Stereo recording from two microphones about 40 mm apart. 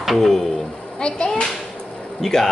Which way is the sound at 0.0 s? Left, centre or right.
Centre.